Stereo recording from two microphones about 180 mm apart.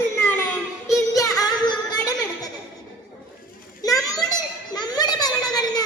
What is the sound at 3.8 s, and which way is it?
Children playing, 20° left (ahead or behind).